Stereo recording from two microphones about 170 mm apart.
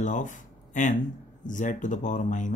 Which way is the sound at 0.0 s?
45° left (ahead or behind).